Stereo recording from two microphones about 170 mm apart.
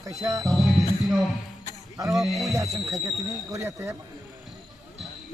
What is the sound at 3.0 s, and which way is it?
Speech, 20° right (ahead or behind).